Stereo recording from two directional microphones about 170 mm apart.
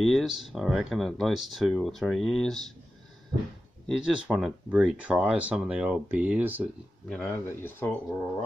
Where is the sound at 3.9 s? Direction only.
5° right (ahead or behind).